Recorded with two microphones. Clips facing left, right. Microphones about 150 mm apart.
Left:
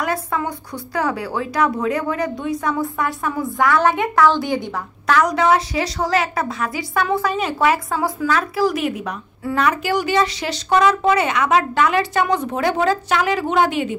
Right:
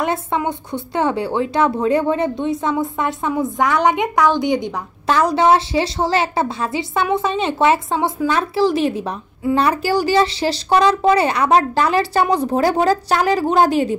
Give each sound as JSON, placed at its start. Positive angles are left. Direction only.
{"t": 0.0, "sound": "speech", "side_deg": -25}